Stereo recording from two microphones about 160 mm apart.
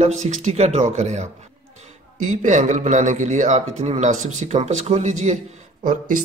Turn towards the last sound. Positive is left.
turn(degrees=-55)  # may be behind; listen again after turning